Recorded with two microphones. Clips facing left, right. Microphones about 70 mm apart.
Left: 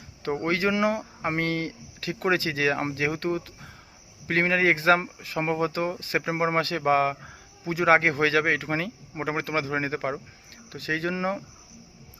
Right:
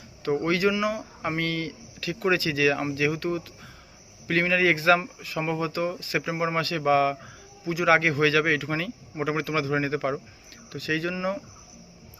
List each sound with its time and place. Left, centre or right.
0.3 s speech: left